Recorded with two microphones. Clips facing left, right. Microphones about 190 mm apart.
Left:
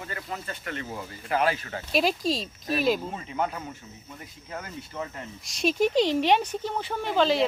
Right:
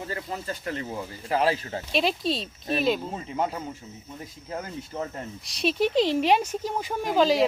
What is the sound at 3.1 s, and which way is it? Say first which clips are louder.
Speech: right 1 dB; 25° right (ahead or behind).